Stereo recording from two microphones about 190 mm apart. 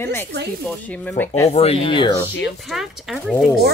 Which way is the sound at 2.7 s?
Centre (ahead or behind).